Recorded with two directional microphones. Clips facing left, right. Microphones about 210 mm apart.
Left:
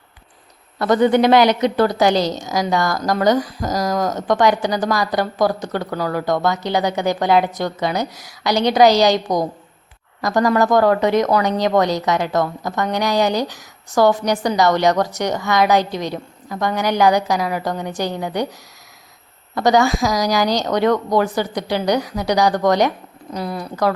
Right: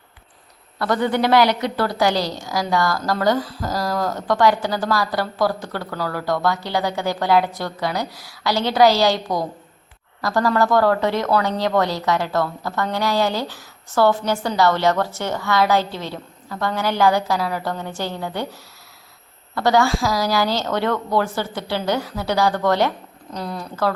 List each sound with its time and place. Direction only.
0.8 s a woman's voice: 20° left (ahead or behind)
19.5 s a woman's voice: 15° left (ahead or behind)